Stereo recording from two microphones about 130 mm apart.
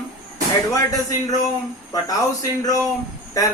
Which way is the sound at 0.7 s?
25° left (ahead or behind).